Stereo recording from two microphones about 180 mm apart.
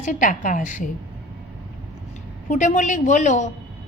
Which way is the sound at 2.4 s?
45° left (ahead or behind).